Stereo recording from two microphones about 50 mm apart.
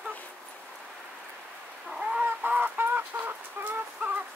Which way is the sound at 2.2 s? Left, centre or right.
Right.